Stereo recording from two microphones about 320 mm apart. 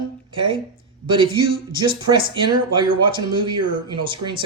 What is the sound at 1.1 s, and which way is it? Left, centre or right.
Speech, centre.